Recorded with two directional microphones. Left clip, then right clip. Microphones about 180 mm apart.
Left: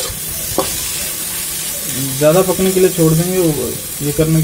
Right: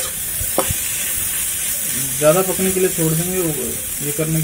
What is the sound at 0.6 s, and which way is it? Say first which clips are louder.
Stir: left 2 dB; centre (ahead or behind).